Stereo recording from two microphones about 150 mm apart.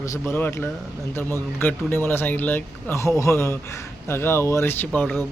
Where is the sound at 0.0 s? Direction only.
20° left (ahead or behind).